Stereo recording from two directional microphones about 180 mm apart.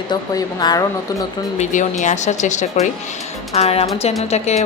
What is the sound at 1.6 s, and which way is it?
Speech, 40° left (ahead or behind).